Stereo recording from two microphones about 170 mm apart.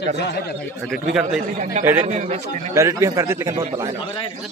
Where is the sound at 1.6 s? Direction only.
45° right (ahead or behind).